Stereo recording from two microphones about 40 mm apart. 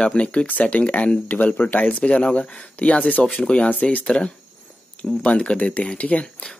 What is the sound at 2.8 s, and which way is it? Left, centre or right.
Speech, left.